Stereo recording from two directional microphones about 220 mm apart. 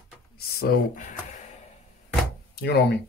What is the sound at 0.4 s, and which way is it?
Speech, 45° left (ahead or behind).